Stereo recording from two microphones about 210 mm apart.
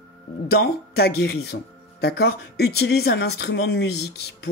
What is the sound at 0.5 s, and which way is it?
Speech, 50° left (ahead or behind).